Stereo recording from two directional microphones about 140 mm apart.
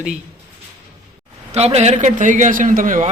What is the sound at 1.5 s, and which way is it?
A man's voice, 50° right (ahead or behind).